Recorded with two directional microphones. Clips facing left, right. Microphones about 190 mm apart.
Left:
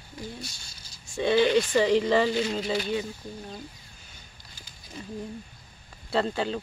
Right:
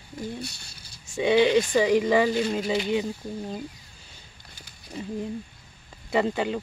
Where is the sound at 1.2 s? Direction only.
15° right (ahead or behind).